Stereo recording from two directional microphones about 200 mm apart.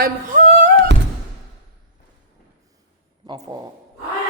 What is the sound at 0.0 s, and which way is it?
Humming, 40° right (ahead or behind).